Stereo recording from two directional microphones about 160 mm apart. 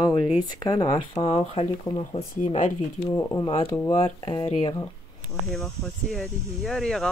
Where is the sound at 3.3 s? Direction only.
30° left (ahead or behind).